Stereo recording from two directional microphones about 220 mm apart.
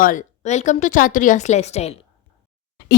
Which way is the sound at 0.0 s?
35° left (ahead or behind).